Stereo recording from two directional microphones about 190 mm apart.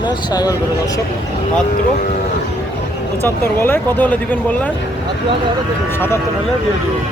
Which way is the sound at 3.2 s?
10° left (ahead or behind).